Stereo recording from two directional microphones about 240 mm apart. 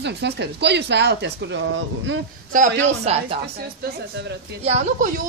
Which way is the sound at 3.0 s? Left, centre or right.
Right.